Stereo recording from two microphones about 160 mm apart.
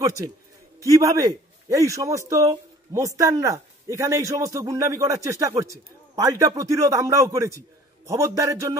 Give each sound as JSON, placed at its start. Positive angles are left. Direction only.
{"t": 0.0, "sound": "a man's voice", "side_deg": -25}